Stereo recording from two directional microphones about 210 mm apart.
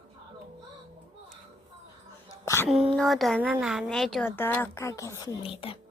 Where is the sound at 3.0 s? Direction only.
Centre (ahead or behind).